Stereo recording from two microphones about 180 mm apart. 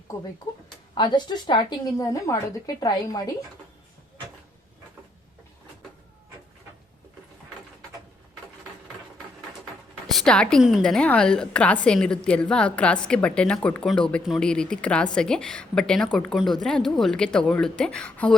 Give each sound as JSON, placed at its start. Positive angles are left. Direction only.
{"t": 0.9, "sound": "a woman's voice", "side_deg": 25}
{"t": 10.1, "sound": "a woman's voice", "side_deg": 5}